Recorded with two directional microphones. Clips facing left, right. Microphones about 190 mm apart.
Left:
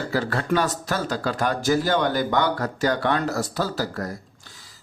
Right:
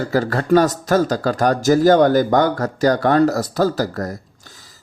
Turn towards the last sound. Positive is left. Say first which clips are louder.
# right 2 dB
turn(degrees=-45)  # may be behind; listen again after turning